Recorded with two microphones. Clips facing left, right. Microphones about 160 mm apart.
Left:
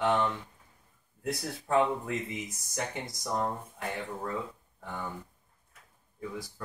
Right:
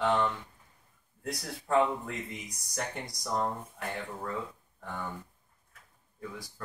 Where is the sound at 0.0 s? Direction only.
10° left (ahead or behind).